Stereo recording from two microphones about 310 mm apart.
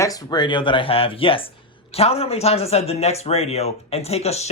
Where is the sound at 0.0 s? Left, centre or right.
Centre.